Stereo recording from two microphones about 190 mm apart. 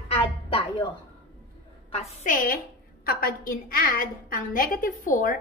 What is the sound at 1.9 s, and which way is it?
A woman's voice, 35° left (ahead or behind).